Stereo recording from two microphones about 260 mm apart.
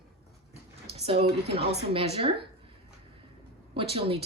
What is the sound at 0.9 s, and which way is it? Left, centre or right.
Speech, right.